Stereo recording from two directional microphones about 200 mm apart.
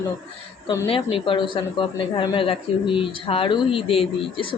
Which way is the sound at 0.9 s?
25° left (ahead or behind).